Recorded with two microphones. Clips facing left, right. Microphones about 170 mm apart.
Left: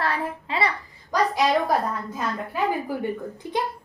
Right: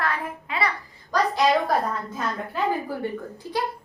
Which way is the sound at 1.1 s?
15° left (ahead or behind).